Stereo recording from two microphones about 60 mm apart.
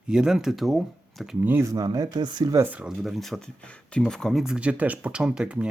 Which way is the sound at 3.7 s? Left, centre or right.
Centre.